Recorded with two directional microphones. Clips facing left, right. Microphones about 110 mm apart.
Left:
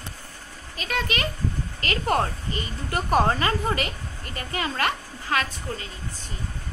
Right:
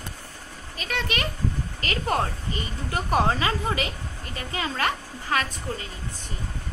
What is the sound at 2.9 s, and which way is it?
A woman's voice, 5° right (ahead or behind).